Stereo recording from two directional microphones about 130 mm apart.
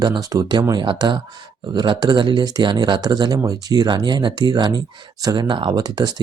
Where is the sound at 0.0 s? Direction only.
30° right (ahead or behind).